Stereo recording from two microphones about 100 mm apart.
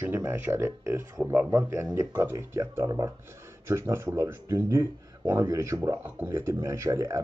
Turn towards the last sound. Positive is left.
turn(degrees=-30)  # may be behind; listen again after turning